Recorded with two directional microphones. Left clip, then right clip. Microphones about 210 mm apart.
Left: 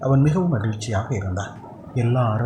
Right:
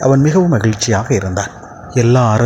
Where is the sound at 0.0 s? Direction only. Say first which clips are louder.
Right 10 dB; 30° right (ahead or behind).